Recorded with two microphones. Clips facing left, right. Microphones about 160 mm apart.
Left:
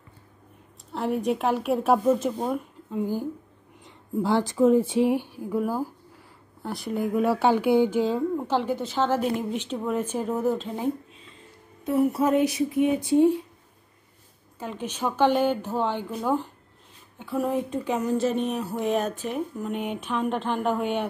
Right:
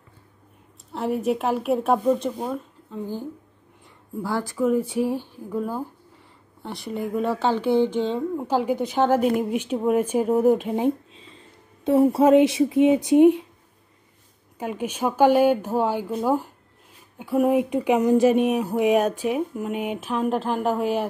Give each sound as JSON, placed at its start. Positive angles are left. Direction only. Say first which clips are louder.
{"t": 0.9, "sound": "a woman's voice", "louder": "right 2 dB", "side_deg": 0}
{"t": 8.4, "sound": "speech", "louder": "right 3 dB", "side_deg": -10}
{"t": 11.8, "sound": "a woman's voice", "louder": "right 5 dB", "side_deg": -30}
{"t": 14.6, "sound": "speech", "louder": "right 4 dB", "side_deg": -10}